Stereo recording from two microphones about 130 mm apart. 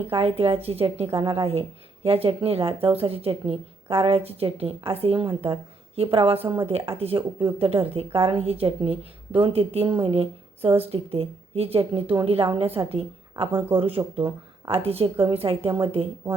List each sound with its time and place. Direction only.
0.1 s a woman's voice: 50° right (ahead or behind)
1.2 s speech: 35° right (ahead or behind)
2.0 s a woman's voice: 50° right (ahead or behind)
5.2 s a woman's voice: 35° right (ahead or behind)
14.2 s a sound: 25° right (ahead or behind)
14.7 s a woman's voice: 50° right (ahead or behind)